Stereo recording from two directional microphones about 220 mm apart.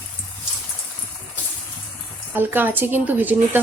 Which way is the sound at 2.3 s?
10° right (ahead or behind).